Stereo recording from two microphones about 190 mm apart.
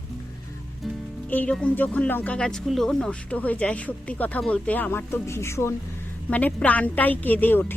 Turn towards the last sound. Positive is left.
turn(degrees=10)  # may be behind; listen again after turning